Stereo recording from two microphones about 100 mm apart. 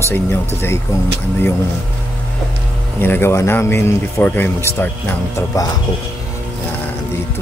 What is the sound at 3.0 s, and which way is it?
Speech, 20° left (ahead or behind).